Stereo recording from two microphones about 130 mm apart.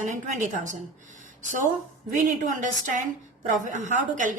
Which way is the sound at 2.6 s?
75° right (ahead or behind).